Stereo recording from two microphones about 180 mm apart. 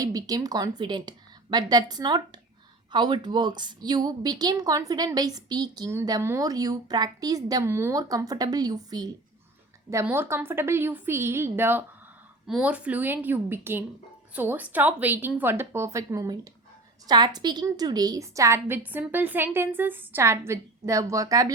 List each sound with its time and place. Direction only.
0.0 s a woman's voice: 20° right (ahead or behind)